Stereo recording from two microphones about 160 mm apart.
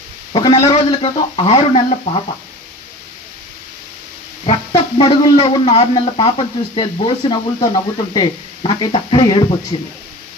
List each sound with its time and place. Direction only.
0.3 s a sound: 35° left (ahead or behind)
0.7 s speech: 35° left (ahead or behind)
4.5 s speech: 30° left (ahead or behind)